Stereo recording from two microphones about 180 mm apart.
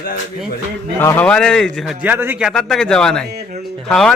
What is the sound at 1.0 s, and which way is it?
A man's voice, 10° left (ahead or behind).